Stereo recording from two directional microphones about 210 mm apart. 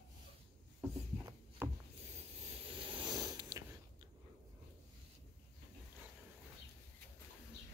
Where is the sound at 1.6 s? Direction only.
10° right (ahead or behind).